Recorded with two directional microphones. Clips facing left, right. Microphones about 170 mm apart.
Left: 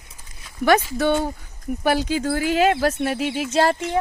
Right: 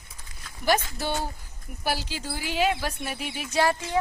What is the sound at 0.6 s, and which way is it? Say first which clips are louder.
Speech: left 7 dB; 55° left (ahead or behind).